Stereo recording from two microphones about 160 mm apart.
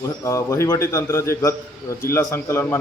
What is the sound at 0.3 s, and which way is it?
A man's voice, 20° left (ahead or behind).